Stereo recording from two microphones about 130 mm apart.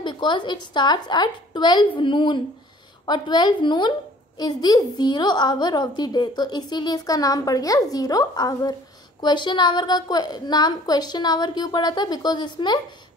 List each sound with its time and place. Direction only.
0.0 s a woman's voice: 35° left (ahead or behind)